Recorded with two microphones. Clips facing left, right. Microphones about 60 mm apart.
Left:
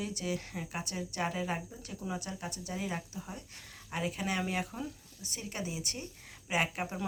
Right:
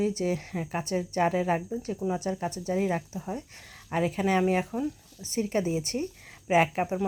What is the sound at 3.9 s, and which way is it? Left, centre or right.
Speech, right.